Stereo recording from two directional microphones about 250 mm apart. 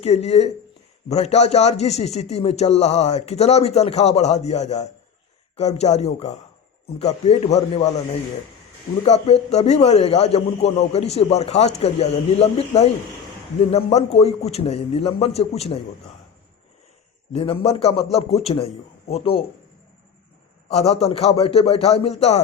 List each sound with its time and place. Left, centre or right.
0.0 s a man's voice: left
9.0 s a man's voice: left
17.3 s a man's voice: left
20.7 s a man's voice: left